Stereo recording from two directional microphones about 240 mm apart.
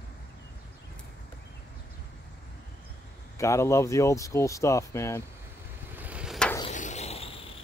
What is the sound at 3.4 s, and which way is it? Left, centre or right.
Speech, centre.